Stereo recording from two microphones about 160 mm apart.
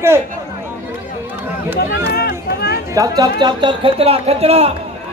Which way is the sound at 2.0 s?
85° left.